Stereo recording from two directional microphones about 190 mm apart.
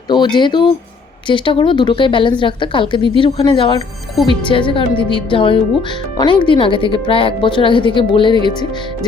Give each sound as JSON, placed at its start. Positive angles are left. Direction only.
{"t": 0.3, "sound": "a woman's voice", "side_deg": 25}